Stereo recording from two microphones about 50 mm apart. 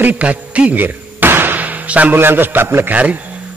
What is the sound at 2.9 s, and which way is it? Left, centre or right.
Speech, right.